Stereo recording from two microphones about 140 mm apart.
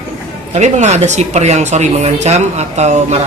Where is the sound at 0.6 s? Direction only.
55° right (ahead or behind).